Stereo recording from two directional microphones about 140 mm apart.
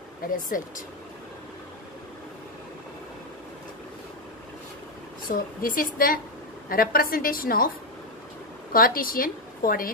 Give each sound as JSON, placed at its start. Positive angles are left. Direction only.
{"t": 0.3, "sound": "speech", "side_deg": 80}
{"t": 5.3, "sound": "a woman's voice", "side_deg": 85}
{"t": 8.7, "sound": "a woman's voice", "side_deg": 90}